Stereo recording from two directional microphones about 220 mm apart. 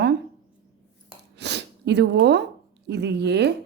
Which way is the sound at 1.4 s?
50° right (ahead or behind).